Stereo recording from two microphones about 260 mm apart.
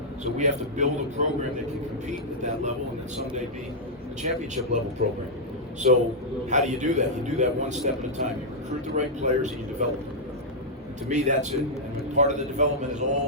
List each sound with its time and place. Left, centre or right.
0.3 s a man's voice: right
4.2 s a man's voice: right
11.1 s a man's voice: right